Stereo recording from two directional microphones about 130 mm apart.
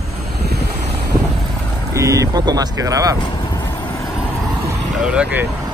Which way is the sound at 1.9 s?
25° right (ahead or behind).